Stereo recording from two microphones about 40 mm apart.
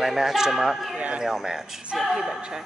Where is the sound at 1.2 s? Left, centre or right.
Centre.